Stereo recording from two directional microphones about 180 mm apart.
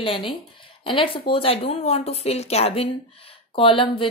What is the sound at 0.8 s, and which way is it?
A woman's voice, 30° left (ahead or behind).